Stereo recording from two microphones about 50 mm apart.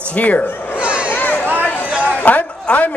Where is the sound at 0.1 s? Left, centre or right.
Left.